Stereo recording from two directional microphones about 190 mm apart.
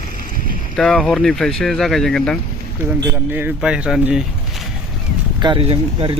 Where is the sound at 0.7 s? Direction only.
5° left (ahead or behind).